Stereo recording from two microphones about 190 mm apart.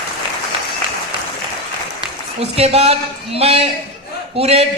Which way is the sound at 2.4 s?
30° right (ahead or behind).